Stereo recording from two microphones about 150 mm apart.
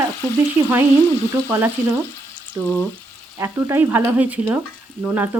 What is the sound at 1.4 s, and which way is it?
Speech, 15° right (ahead or behind).